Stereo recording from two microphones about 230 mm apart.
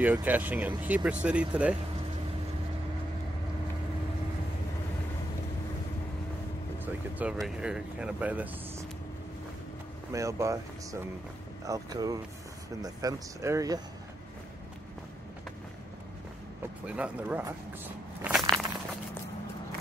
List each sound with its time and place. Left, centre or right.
0.0 s speech: centre
6.8 s speech: centre
10.1 s speech: centre
16.8 s speech: centre
18.2 s a sound: centre